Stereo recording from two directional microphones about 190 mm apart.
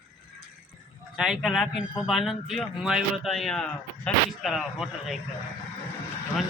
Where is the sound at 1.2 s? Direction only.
Centre (ahead or behind).